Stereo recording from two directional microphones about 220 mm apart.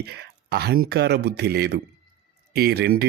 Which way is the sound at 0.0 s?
50° right (ahead or behind).